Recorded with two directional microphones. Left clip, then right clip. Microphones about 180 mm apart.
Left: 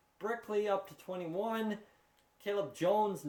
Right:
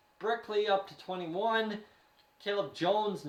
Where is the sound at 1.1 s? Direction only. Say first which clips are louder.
Right 3 dB; 40° left (ahead or behind).